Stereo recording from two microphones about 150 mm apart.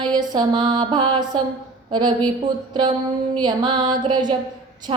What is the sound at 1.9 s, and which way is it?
Speech, 30° right (ahead or behind).